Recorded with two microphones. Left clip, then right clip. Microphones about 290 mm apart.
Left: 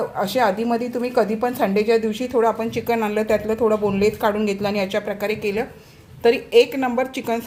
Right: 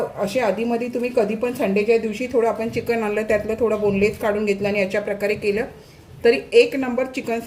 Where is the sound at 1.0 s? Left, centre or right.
Left.